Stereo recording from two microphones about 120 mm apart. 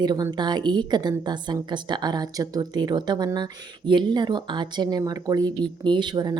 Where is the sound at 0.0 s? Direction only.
35° right (ahead or behind).